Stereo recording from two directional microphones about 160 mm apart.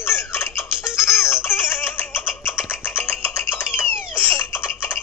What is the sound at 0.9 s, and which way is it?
Music, 15° left (ahead or behind).